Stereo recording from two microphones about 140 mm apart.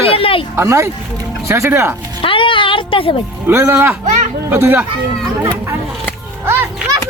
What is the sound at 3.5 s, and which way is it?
Speech, 15° right (ahead or behind).